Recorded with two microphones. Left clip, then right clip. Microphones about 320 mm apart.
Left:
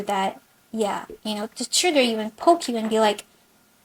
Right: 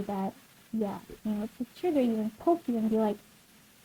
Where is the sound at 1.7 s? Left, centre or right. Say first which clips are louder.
Left 10 dB; centre.